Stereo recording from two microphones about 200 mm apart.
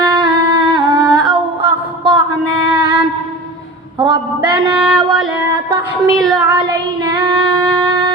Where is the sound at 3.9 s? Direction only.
25° right (ahead or behind).